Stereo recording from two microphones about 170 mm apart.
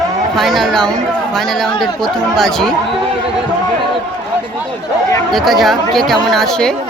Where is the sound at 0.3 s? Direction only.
Centre (ahead or behind).